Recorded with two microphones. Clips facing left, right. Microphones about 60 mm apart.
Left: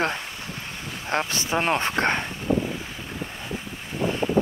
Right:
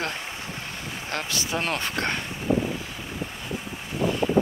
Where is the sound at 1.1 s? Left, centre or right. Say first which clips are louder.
Left 5 dB; left.